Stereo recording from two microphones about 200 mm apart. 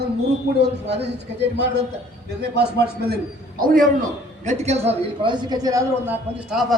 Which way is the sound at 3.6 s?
45° right (ahead or behind).